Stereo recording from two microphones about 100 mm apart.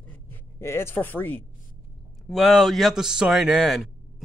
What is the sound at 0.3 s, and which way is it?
Speech, 25° left (ahead or behind).